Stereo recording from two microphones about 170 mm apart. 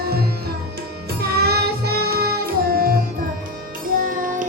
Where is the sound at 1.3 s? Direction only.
70° right (ahead or behind).